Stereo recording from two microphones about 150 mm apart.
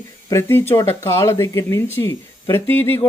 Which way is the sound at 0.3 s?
20° left (ahead or behind).